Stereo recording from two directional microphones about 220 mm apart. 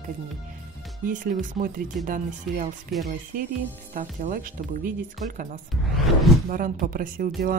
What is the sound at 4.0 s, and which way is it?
Speech, 40° right (ahead or behind).